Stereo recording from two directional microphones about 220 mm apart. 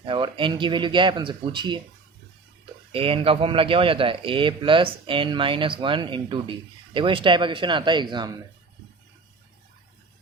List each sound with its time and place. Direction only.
0.0 s a man's voice: 20° right (ahead or behind)
2.9 s a man's voice: 25° right (ahead or behind)